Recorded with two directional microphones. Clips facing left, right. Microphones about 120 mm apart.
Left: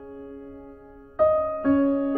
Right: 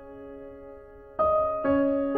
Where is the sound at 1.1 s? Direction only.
30° right (ahead or behind).